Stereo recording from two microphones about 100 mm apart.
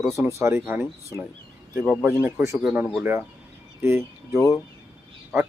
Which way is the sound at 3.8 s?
25° right (ahead or behind).